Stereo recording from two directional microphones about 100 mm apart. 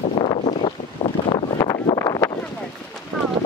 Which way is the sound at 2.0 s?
30° left (ahead or behind).